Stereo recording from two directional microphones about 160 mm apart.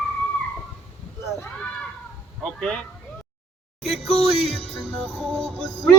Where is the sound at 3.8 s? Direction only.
Centre (ahead or behind).